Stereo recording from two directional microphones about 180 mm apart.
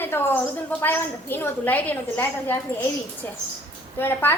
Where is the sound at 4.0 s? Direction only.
10° left (ahead or behind).